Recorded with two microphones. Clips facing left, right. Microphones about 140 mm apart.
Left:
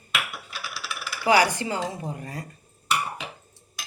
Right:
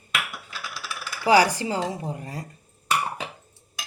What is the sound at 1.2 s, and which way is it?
Speech, 35° right (ahead or behind).